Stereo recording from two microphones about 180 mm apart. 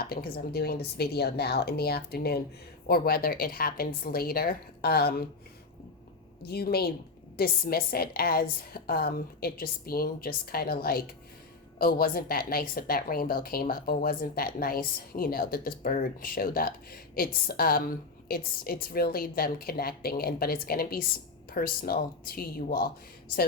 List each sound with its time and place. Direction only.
0.0 s a woman's voice: 60° left (ahead or behind)
6.4 s a woman's voice: 60° left (ahead or behind)